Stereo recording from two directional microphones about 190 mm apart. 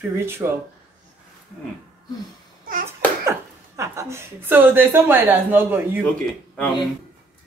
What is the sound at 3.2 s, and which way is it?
A woman's voice, 15° right (ahead or behind).